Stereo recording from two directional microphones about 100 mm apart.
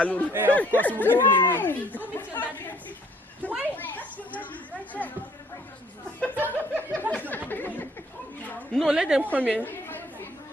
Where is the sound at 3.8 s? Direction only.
15° left (ahead or behind).